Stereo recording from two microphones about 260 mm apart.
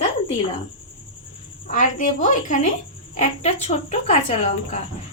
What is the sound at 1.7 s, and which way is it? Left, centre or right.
A woman's voice, left.